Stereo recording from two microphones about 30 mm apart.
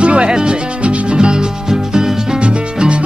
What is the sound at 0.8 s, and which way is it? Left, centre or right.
Music, right.